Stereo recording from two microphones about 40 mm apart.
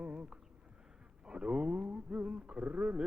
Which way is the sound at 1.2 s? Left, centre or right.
Right.